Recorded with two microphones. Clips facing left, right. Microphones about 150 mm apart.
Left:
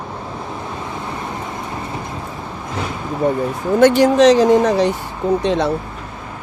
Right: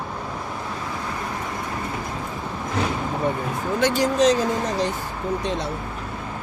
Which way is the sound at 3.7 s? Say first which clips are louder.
Left 9 dB; 60° left (ahead or behind).